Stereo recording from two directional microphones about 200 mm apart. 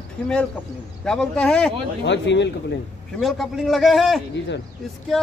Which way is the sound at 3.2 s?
Centre (ahead or behind).